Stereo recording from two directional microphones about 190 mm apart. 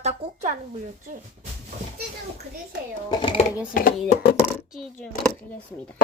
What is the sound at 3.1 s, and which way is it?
Speech, 25° left (ahead or behind).